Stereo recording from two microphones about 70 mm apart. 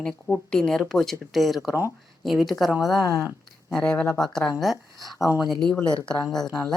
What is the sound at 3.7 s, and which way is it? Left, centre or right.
A woman's voice, centre.